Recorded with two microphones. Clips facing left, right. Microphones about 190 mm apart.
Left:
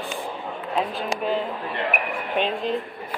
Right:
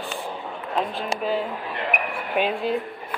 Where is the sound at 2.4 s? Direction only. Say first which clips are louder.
Right 2 dB; 10° right (ahead or behind).